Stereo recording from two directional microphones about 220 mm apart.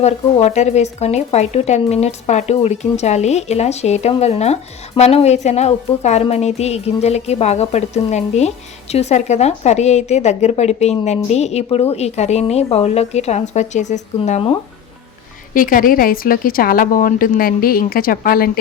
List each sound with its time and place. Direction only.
0.0 s a woman's voice: 30° left (ahead or behind)
15.5 s a woman's voice: 40° left (ahead or behind)